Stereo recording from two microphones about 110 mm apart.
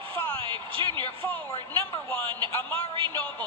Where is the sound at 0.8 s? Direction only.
45° right (ahead or behind).